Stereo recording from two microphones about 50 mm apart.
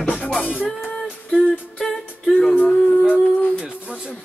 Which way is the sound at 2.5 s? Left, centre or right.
Left.